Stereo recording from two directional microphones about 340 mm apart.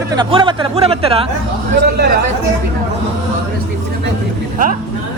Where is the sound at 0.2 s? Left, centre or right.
Centre.